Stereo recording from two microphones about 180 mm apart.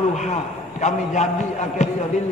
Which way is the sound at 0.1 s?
40° left (ahead or behind).